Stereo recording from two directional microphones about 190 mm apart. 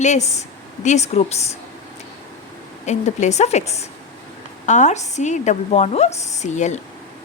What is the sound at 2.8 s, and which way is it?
Speech, 35° left (ahead or behind).